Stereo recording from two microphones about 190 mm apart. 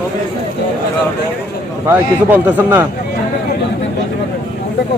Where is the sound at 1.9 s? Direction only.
10° right (ahead or behind).